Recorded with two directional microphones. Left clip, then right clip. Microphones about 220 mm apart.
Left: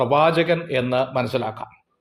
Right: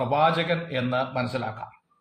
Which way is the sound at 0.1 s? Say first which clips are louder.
Left 2 dB; 40° left (ahead or behind).